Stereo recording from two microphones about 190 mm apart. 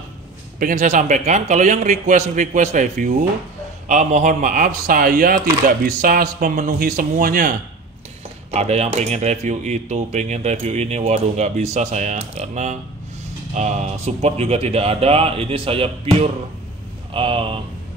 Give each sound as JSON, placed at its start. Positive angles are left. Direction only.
{"t": 0.6, "sound": "speech", "side_deg": -45}
{"t": 8.5, "sound": "speech", "side_deg": -35}